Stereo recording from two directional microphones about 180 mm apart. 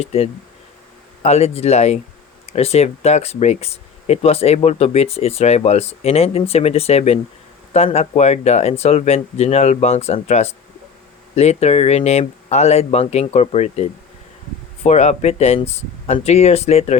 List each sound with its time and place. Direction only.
0.0 s speech: 35° left (ahead or behind)
14.8 s speech: 40° left (ahead or behind)